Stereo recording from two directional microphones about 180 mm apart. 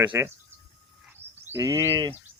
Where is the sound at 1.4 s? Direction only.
15° right (ahead or behind).